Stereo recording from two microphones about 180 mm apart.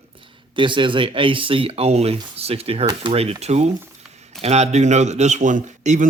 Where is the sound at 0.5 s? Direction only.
25° right (ahead or behind).